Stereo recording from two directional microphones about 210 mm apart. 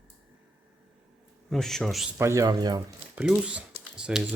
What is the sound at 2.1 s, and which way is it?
Speech, 15° right (ahead or behind).